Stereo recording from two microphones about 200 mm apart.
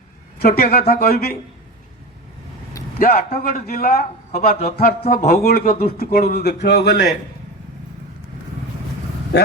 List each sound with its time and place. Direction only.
0.3 s a man's voice: 50° left (ahead or behind)
3.0 s a man's voice: 50° left (ahead or behind)
9.3 s speech: 55° left (ahead or behind)